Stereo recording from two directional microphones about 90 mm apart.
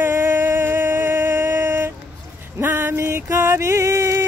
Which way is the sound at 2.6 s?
25° right (ahead or behind).